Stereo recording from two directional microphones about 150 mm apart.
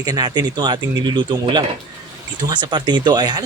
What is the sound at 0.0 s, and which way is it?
Speech, 25° right (ahead or behind).